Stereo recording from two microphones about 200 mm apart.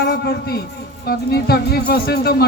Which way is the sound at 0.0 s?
55° left (ahead or behind).